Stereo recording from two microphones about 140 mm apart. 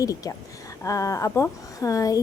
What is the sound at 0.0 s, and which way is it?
A woman's voice, 25° left (ahead or behind).